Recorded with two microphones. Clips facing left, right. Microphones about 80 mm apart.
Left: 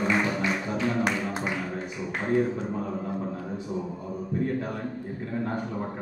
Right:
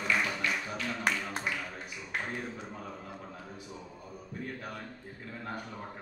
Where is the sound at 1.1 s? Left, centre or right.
Left.